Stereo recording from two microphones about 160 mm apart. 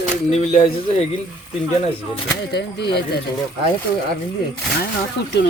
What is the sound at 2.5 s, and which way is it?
Speech, 90° left.